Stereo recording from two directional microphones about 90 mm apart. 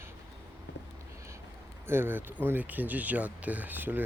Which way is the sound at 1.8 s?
25° right (ahead or behind).